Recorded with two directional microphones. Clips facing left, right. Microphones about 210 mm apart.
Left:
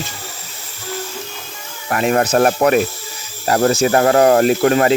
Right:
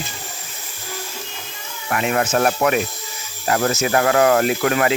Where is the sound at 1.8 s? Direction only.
40° left (ahead or behind).